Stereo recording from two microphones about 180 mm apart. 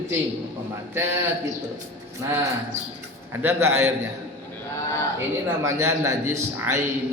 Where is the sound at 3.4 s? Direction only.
15° right (ahead or behind).